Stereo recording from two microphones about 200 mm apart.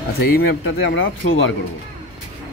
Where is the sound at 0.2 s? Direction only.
50° left (ahead or behind).